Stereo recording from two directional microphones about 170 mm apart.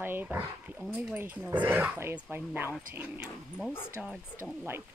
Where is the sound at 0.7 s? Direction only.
Centre (ahead or behind).